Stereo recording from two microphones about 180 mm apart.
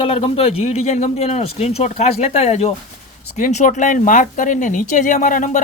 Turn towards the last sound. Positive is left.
turn(degrees=45)  # may be behind; listen again after turning